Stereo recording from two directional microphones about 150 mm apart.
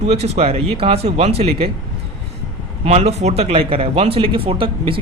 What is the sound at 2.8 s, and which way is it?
A man's voice, 45° right (ahead or behind).